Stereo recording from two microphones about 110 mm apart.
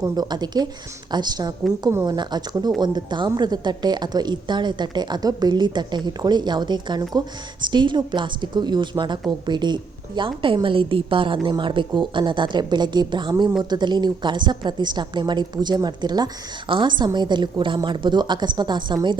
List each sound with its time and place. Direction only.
0.0 s a woman's voice: 40° right (ahead or behind)